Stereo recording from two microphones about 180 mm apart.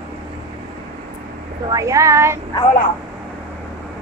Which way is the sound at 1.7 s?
15° right (ahead or behind).